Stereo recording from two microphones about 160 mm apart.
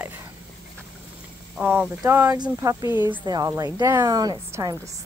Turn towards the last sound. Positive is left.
turn(degrees=-20)  # may be behind; listen again after turning